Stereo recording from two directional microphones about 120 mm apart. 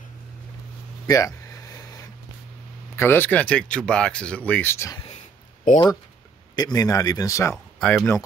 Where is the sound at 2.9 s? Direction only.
20° left (ahead or behind).